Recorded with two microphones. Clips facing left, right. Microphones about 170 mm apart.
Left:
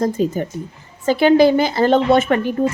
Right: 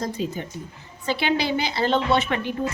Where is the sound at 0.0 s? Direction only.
45° left (ahead or behind).